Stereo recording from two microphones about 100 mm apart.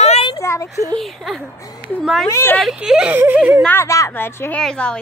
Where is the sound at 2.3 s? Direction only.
25° left (ahead or behind).